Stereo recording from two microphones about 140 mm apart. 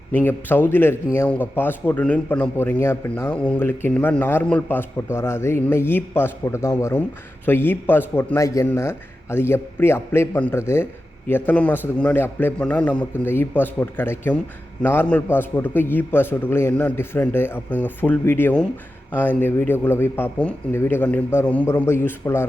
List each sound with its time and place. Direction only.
0.1 s a man's voice: 15° left (ahead or behind)